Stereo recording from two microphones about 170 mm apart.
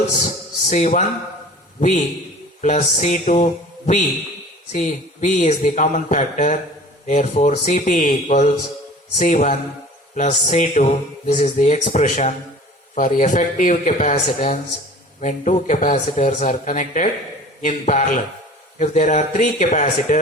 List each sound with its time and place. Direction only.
0.7 s a man's voice: 45° left (ahead or behind)